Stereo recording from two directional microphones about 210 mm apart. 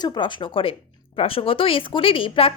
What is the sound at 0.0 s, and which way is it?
Speech, 20° left (ahead or behind).